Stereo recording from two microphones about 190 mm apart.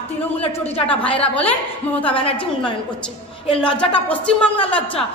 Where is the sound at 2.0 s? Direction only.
30° left (ahead or behind).